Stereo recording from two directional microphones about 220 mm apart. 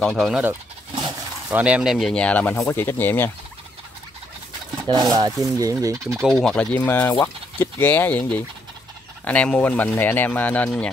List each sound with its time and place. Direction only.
0.0 s speech: centre (ahead or behind)
4.8 s speech: 20° right (ahead or behind)
5.6 s fowl: 15° right (ahead or behind)
6.2 s speech: 5° left (ahead or behind)